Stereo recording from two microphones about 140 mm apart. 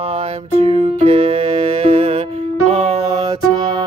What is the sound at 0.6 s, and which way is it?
Music, 45° right (ahead or behind).